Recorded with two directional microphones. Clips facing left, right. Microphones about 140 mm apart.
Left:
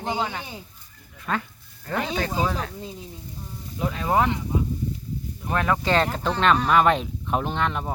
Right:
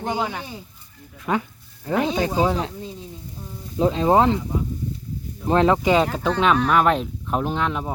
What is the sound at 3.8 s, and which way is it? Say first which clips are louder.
Speech: right 6 dB; 25° right (ahead or behind).